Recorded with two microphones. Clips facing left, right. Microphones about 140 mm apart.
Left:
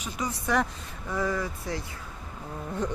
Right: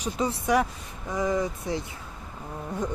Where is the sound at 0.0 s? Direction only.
30° right (ahead or behind).